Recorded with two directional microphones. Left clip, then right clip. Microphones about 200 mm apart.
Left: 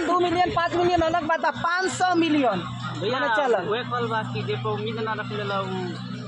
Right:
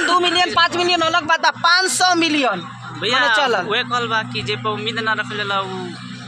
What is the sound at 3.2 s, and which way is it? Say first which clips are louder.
A man's voice: right 6 dB; 10° right (ahead or behind).